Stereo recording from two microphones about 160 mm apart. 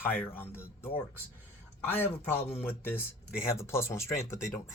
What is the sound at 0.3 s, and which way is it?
Speech, 15° left (ahead or behind).